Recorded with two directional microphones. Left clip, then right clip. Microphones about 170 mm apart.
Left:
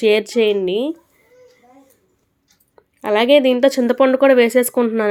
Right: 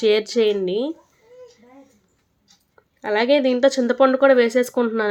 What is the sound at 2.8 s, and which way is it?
Speech, 10° left (ahead or behind).